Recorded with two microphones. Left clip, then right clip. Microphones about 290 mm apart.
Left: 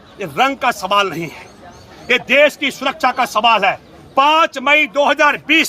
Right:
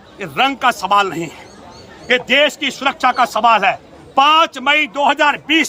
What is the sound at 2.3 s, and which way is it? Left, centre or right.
Speech, centre.